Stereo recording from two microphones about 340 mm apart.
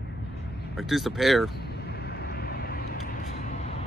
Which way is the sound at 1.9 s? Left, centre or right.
Left.